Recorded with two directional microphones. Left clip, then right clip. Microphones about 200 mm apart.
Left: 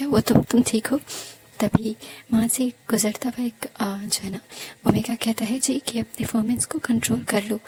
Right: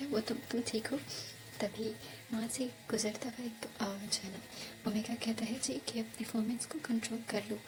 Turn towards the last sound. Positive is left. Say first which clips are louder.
# left 15 dB
turn(degrees=45)  # may be behind; listen again after turning